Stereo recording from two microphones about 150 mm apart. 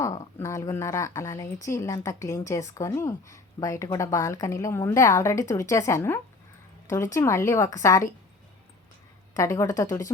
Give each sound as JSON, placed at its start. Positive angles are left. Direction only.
{"t": 0.0, "sound": "a woman's voice", "side_deg": 20}
{"t": 9.3, "sound": "a woman's voice", "side_deg": 20}